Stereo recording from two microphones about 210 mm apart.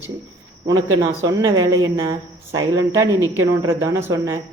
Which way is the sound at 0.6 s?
65° right (ahead or behind).